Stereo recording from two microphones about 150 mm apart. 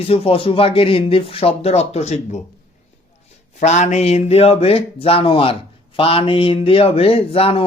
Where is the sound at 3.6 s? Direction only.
50° left (ahead or behind).